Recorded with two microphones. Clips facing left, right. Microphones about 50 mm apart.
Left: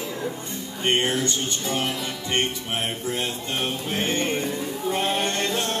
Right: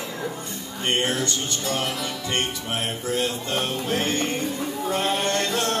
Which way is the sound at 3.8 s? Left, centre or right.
Left.